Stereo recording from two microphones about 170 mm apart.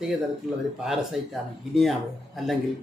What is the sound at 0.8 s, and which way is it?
Speech, centre (ahead or behind).